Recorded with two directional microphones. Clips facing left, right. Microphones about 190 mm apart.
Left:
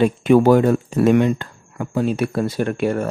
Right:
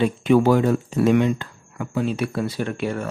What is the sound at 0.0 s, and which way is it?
Speech, 50° left (ahead or behind).